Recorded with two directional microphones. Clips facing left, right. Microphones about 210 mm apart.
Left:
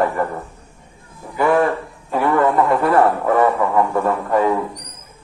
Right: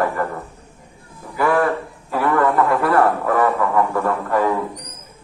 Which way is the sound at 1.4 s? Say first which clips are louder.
Left 2 dB; 20° left (ahead or behind).